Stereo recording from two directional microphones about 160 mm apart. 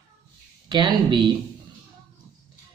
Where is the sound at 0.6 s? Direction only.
30° right (ahead or behind).